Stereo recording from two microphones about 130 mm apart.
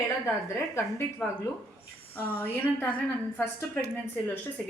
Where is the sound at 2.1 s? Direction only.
15° left (ahead or behind).